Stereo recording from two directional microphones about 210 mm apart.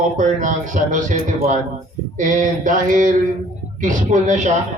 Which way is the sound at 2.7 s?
40° right (ahead or behind).